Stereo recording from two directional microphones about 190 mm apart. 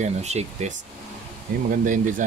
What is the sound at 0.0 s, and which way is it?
Speech, 35° right (ahead or behind).